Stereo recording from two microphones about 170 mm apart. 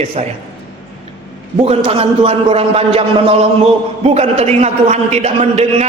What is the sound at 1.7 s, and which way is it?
A man's voice, 35° right (ahead or behind).